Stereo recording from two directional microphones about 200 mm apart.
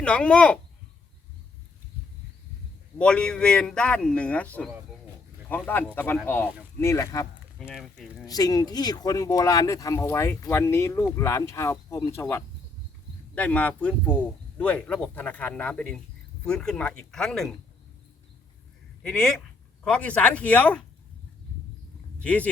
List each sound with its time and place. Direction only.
0.0 s speech: 5° left (ahead or behind)
3.0 s speech: 5° left (ahead or behind)
7.6 s speech: centre (ahead or behind)
8.3 s speech: 20° left (ahead or behind); by 17.5 s centre (ahead or behind)
19.0 s speech: 5° left (ahead or behind)
22.2 s speech: 5° left (ahead or behind)